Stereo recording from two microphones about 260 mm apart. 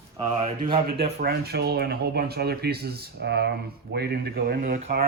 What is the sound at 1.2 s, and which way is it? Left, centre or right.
Speech, right.